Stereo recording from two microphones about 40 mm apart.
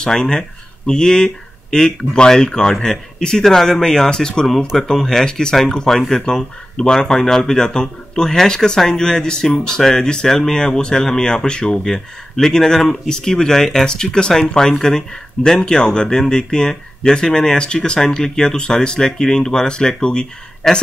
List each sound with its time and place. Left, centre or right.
0.0 s speech: centre
20.6 s speech: centre